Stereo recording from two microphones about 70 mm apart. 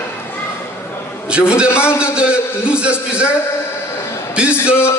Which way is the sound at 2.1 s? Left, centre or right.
Centre.